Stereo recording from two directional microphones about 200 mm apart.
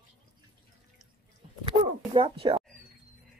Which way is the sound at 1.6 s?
25° right (ahead or behind).